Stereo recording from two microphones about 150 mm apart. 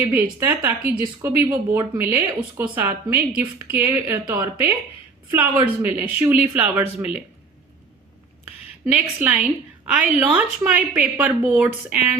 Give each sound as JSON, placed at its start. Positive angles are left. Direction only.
{"t": 0.0, "sound": "a woman's voice", "side_deg": -15}
{"t": 8.9, "sound": "a woman's voice", "side_deg": -10}